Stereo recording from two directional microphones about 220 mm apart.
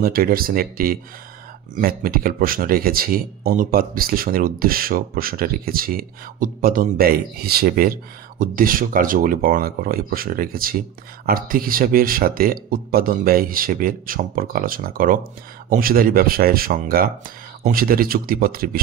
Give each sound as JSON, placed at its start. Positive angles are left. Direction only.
{"t": 0.0, "sound": "speech", "side_deg": -40}